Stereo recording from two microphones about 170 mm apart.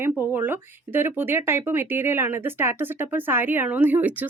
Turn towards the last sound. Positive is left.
turn(degrees=-10)  # may be behind; listen again after turning